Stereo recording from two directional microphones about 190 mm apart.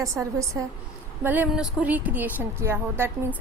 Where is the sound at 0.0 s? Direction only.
15° right (ahead or behind).